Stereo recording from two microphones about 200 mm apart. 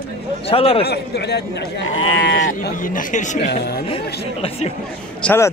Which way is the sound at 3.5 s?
55° left (ahead or behind).